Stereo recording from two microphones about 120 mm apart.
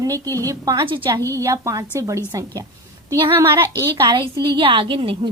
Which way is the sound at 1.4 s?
25° right (ahead or behind).